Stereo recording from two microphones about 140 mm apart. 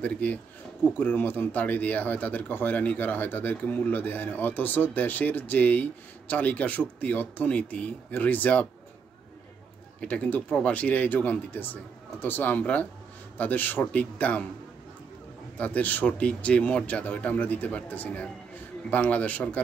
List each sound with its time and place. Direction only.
0.0 s speech: 10° left (ahead or behind)
9.9 s speech: 10° left (ahead or behind)
15.5 s speech: 10° left (ahead or behind)